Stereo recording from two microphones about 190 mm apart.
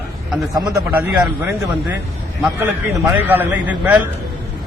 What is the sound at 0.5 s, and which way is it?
Speech, 20° right (ahead or behind).